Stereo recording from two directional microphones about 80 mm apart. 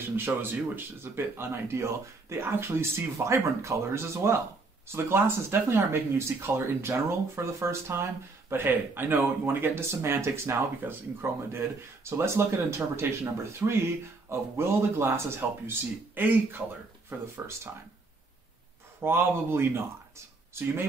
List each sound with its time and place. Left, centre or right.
0.1 s speech: right
18.9 s speech: right